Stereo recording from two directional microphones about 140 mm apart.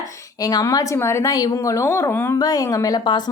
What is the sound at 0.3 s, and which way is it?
A woman's voice, 25° left (ahead or behind).